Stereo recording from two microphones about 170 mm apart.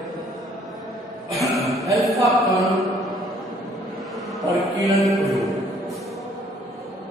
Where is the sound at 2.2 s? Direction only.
Centre (ahead or behind).